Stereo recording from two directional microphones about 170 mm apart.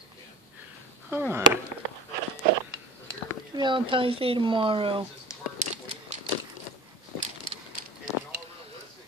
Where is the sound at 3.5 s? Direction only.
30° right (ahead or behind).